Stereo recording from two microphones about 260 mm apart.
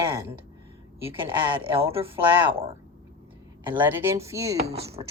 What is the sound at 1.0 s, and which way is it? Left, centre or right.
Speech, centre.